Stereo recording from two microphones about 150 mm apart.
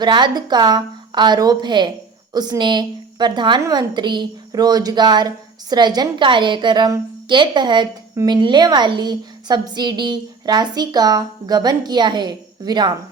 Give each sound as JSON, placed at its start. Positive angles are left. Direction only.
{"t": 0.0, "sound": "a woman's voice", "side_deg": -30}